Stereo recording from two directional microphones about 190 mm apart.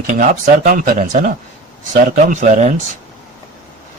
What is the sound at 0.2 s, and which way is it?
Speech, 45° right (ahead or behind).